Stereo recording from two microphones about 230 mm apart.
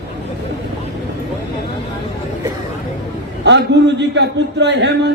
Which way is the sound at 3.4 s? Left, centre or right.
Right.